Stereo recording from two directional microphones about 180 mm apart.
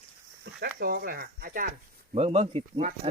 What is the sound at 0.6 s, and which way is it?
Speech, 60° right (ahead or behind).